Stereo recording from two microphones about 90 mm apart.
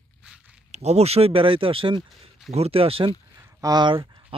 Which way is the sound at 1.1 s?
90° right.